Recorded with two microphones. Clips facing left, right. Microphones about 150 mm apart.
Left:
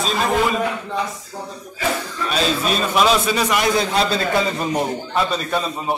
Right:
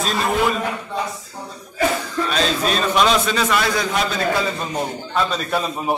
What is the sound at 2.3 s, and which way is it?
A man's voice, 5° left (ahead or behind).